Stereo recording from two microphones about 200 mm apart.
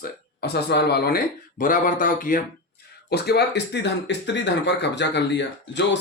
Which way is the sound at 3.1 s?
55° left (ahead or behind).